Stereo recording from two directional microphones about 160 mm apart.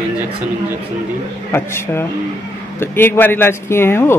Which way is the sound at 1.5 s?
15° left (ahead or behind).